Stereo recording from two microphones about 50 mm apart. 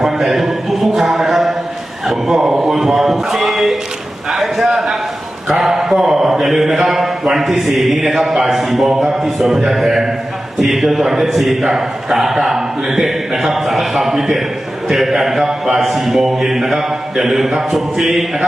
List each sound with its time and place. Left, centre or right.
0.0 s music: centre
2.0 s a man's voice: centre